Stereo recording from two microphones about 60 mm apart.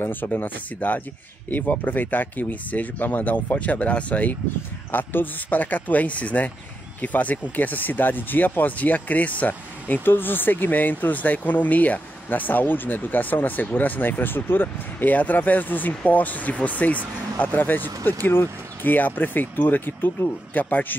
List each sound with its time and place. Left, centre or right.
0.0 s speech: left